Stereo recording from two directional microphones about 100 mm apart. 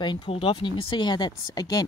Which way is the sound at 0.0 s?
55° left (ahead or behind).